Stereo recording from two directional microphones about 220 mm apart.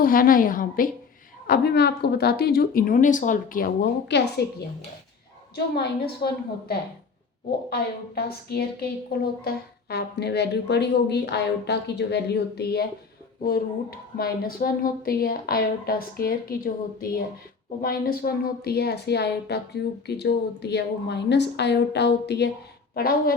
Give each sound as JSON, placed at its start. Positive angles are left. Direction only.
{"t": 0.0, "sound": "a woman's voice", "side_deg": 40}
{"t": 5.5, "sound": "a woman's voice", "side_deg": 45}